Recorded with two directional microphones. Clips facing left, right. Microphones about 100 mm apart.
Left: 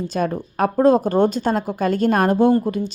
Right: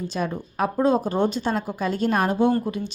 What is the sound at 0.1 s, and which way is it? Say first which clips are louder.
A woman's voice: left 5 dB; 45° left (ahead or behind).